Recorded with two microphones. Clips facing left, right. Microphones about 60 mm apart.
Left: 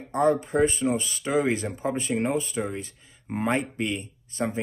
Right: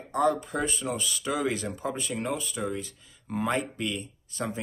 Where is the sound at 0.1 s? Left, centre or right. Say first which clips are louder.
Left 3 dB; left.